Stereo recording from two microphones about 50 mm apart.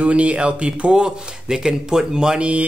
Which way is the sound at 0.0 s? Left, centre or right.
Right.